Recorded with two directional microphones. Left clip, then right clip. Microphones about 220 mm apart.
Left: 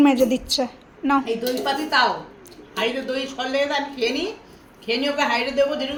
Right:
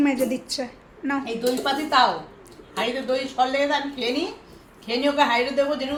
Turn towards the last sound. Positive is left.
turn(degrees=-35)  # may be behind; listen again after turning